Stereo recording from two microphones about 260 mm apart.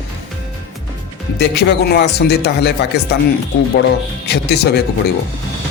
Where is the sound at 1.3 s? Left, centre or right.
Left.